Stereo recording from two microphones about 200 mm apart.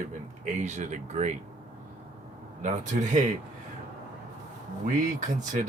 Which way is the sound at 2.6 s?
35° right (ahead or behind).